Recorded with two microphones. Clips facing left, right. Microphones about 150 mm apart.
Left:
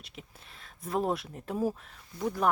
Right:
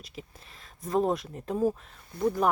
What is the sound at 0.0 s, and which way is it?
Speech, centre (ahead or behind).